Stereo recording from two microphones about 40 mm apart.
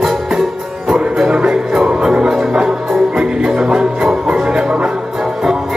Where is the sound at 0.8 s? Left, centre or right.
Centre.